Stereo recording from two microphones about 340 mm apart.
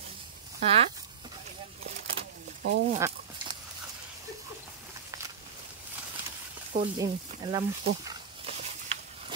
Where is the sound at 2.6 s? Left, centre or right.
Right.